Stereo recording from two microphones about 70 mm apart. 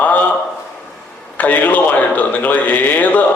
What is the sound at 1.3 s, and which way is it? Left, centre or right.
A man's voice, left.